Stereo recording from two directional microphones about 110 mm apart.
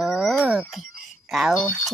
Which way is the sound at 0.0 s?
Centre (ahead or behind).